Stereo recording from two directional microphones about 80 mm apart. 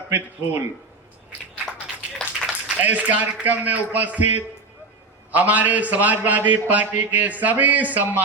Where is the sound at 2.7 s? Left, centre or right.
Right.